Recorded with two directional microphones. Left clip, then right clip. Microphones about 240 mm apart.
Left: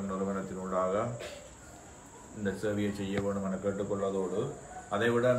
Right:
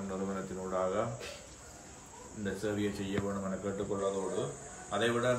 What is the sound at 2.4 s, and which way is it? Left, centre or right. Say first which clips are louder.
Speech: left 2 dB; centre.